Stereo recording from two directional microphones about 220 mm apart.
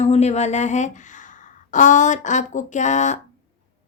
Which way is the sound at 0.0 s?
30° left (ahead or behind).